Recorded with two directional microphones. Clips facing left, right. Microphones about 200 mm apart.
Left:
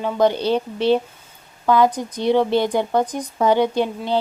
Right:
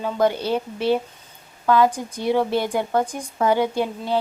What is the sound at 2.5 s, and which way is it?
Speech, 25° left (ahead or behind).